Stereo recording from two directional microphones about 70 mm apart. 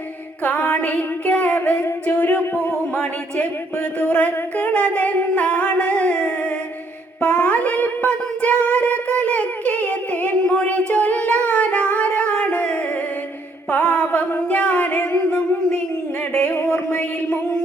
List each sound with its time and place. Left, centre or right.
0.4 s singing: left
2.4 s music: left
4.0 s singing: left
7.2 s a sound: centre
11.4 s music: centre
13.7 s a sound: left